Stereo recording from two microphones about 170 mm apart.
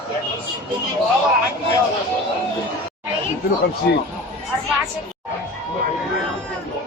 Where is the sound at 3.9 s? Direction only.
75° left (ahead or behind).